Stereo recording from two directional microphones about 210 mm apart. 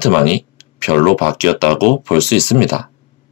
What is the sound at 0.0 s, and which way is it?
Speech, 30° left (ahead or behind).